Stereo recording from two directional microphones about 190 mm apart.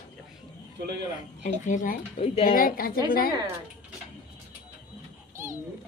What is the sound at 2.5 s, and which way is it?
Speech, 50° left (ahead or behind).